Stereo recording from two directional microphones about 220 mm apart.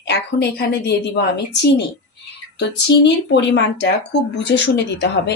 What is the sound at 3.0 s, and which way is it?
Speech, 50° left (ahead or behind).